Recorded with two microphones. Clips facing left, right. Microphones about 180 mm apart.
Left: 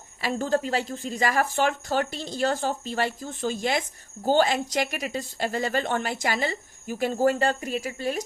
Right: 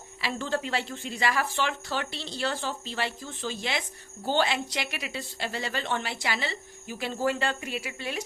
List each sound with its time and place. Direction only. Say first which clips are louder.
0.2 s a woman's voice: left 5 dB; 45° left (ahead or behind)